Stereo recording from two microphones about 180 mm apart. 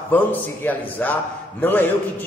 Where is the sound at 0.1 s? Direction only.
10° left (ahead or behind).